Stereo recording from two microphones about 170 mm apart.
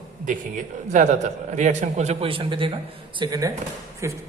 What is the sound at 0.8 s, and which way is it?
A man's voice, 45° right (ahead or behind).